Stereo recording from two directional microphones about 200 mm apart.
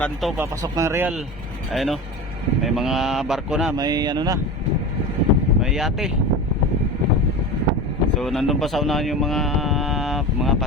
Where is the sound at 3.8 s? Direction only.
20° right (ahead or behind).